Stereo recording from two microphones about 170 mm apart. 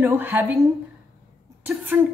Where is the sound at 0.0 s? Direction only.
10° right (ahead or behind).